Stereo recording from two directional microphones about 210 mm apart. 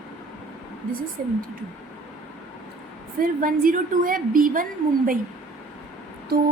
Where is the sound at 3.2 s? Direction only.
40° right (ahead or behind).